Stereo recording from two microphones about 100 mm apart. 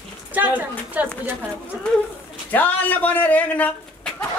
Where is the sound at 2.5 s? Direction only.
15° left (ahead or behind).